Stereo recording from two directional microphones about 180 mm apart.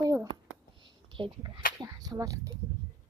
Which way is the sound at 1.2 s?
30° right (ahead or behind).